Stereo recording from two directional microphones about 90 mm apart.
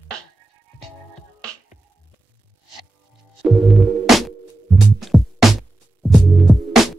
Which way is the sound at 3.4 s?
Centre (ahead or behind).